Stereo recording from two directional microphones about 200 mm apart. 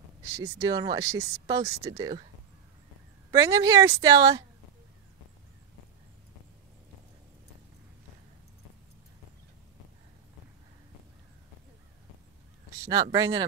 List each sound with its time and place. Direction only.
0.2 s speech: 15° right (ahead or behind)
3.3 s speech: 15° right (ahead or behind)
12.7 s speech: 15° right (ahead or behind)